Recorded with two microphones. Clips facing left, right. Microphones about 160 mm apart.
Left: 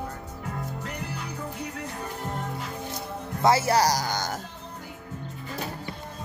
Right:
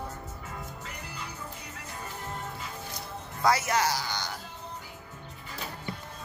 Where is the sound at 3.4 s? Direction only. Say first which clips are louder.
Left 5 dB; 30° left (ahead or behind); by 4.4 s 45° left (ahead or behind).